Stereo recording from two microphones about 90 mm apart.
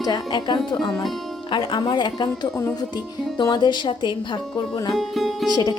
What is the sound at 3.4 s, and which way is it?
Speech, 50° left (ahead or behind).